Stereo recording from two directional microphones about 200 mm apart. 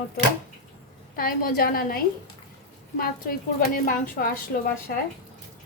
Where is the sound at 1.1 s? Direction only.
45° left (ahead or behind).